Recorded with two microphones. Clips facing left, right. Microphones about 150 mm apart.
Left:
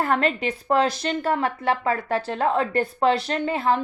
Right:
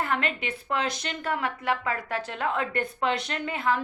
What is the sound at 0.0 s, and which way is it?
A woman's voice, 40° left (ahead or behind).